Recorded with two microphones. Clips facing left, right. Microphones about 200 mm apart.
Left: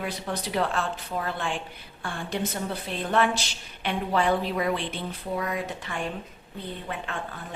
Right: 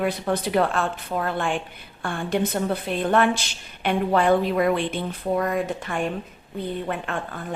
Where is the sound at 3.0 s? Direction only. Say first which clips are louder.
Right 3 dB; 55° right (ahead or behind).